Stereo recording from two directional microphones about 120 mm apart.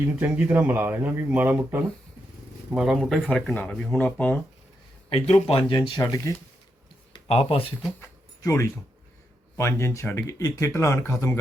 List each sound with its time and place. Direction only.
0.2 s speech: 15° right (ahead or behind)
2.7 s speech: centre (ahead or behind)
5.2 s speech: 55° left (ahead or behind)
6.3 s speech: 30° left (ahead or behind)
7.3 s speech: 50° left (ahead or behind)
8.4 s speech: 25° left (ahead or behind)